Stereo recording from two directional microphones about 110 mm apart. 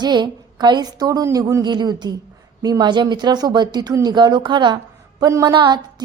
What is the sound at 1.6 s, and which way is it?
A woman's voice, 40° right (ahead or behind).